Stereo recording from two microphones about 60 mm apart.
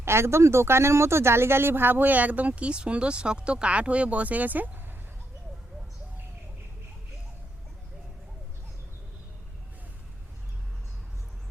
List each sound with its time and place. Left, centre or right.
0.0 s speech: right